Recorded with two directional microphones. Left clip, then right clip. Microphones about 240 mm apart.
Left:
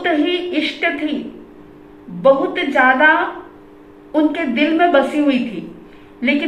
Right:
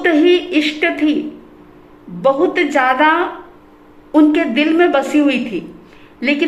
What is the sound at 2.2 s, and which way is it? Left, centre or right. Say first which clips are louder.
A woman's voice: even; right.